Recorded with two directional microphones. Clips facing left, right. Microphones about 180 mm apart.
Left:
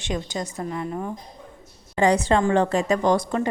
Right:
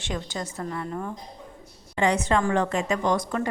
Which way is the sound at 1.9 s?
35° left (ahead or behind).